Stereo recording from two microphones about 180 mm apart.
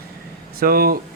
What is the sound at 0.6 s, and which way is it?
Speech, 55° right (ahead or behind).